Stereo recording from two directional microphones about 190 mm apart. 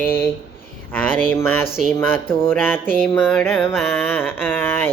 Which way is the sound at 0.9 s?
10° left (ahead or behind).